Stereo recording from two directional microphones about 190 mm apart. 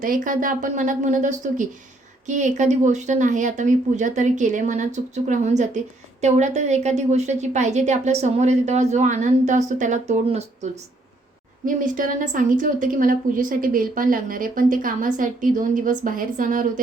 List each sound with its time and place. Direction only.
0.0 s a woman's voice: 45° right (ahead or behind)
11.6 s a woman's voice: 45° right (ahead or behind)